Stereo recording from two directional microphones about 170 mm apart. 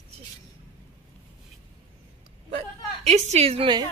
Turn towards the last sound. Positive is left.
turn(degrees=-30)  # may be behind; listen again after turning